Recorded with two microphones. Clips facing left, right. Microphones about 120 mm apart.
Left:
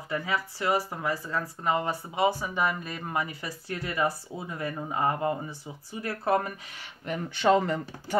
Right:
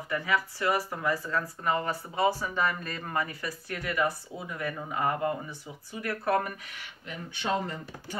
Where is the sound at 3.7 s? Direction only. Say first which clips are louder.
Left 1 dB; 30° left (ahead or behind).